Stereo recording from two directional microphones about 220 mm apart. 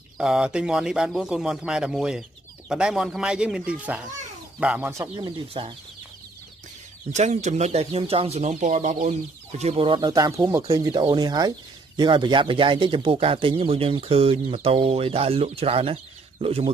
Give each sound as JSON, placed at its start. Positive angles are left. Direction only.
{"t": 0.2, "sound": "speech", "side_deg": -5}
{"t": 7.2, "sound": "speech", "side_deg": -35}